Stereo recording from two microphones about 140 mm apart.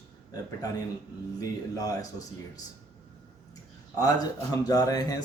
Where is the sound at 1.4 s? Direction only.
25° left (ahead or behind).